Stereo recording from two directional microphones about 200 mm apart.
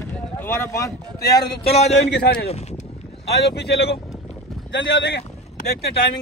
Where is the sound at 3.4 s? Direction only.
55° left (ahead or behind).